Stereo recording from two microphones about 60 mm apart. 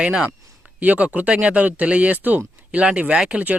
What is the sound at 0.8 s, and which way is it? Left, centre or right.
Speech, right.